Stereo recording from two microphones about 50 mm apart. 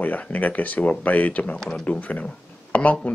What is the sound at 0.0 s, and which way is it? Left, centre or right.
Speech, left.